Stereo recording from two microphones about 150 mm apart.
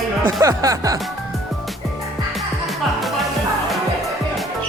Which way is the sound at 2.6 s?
Centre (ahead or behind).